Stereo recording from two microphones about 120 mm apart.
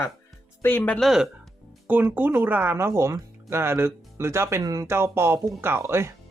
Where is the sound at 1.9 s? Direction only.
15° right (ahead or behind).